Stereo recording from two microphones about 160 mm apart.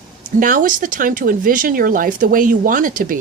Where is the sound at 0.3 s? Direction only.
55° right (ahead or behind).